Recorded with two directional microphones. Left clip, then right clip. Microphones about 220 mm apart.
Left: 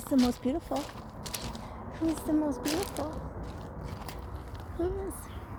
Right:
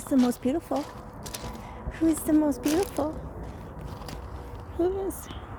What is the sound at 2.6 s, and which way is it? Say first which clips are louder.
Speech: right 6 dB; 10° right (ahead or behind).